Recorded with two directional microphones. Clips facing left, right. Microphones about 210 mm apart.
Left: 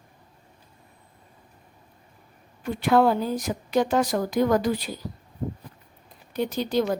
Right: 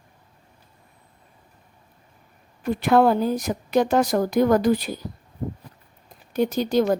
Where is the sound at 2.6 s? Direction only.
45° right (ahead or behind).